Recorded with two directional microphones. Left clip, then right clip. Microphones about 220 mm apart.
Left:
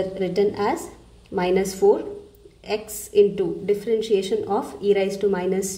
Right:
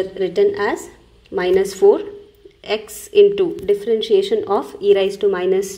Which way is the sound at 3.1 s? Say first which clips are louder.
Right 6 dB; 15° right (ahead or behind).